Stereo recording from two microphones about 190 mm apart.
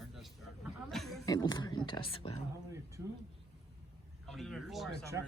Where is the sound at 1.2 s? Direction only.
20° left (ahead or behind).